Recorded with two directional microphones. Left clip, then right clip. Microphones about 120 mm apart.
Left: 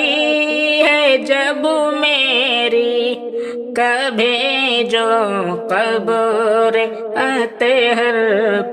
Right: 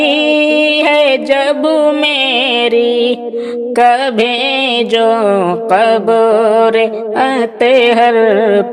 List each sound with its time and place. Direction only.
0.0 s music: 25° right (ahead or behind)